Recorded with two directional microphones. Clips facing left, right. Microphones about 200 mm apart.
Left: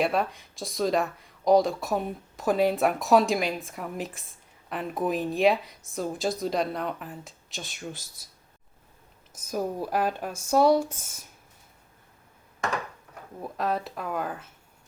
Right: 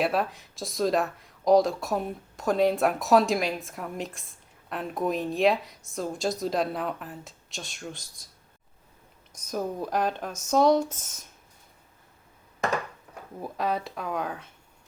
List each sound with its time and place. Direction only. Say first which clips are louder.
0.0 s speech: even; centre (ahead or behind)
9.3 s speech: left 1 dB; 5° left (ahead or behind)
13.4 s speech: even; centre (ahead or behind)